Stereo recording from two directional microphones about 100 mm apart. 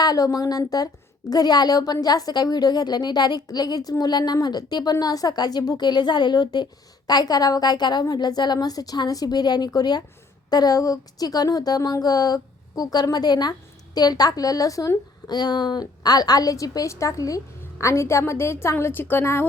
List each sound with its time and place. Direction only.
0.0 s a woman's voice: 40° left (ahead or behind)